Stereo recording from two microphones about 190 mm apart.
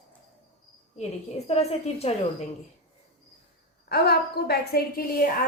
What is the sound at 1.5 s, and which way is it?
Speech, 35° left (ahead or behind).